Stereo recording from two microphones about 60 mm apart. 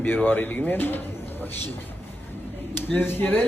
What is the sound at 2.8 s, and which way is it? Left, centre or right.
Speech, left.